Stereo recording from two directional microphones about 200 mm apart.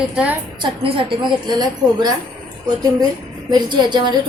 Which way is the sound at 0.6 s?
25° right (ahead or behind).